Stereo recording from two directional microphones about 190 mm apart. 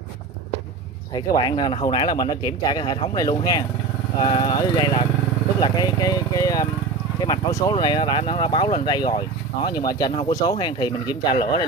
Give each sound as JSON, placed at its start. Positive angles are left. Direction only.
{"t": 1.1, "sound": "speech", "side_deg": 20}